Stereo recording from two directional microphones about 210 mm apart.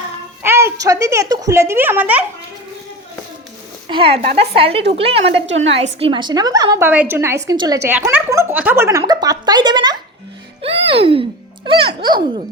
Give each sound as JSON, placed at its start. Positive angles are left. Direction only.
{"t": 0.4, "sound": "a woman's voice", "side_deg": -10}
{"t": 3.8, "sound": "speech", "side_deg": -25}
{"t": 5.5, "sound": "a woman's voice", "side_deg": -60}
{"t": 5.7, "sound": "a woman's voice", "side_deg": -25}